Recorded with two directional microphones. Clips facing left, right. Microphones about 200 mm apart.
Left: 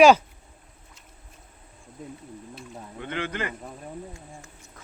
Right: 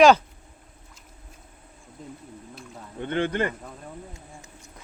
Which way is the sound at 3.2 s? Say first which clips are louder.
Right 6 dB; 55° right (ahead or behind).